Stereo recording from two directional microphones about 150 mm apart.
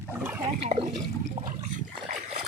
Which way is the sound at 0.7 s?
50° right (ahead or behind).